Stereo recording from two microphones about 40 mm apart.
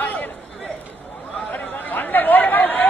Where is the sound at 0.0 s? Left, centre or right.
Left.